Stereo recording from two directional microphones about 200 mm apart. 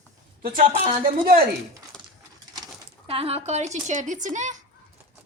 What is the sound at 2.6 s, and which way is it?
A woman's voice, 30° right (ahead or behind).